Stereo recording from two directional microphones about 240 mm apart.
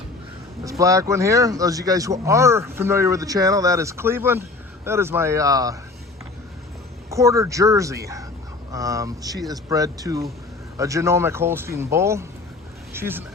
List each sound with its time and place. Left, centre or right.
0.6 s speech: centre
7.1 s speech: centre